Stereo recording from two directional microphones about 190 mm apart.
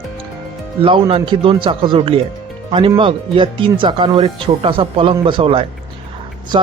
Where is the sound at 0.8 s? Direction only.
30° right (ahead or behind).